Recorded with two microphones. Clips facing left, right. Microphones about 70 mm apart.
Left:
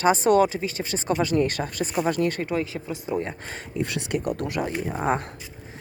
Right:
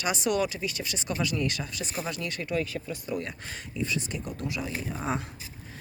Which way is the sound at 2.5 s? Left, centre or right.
Left.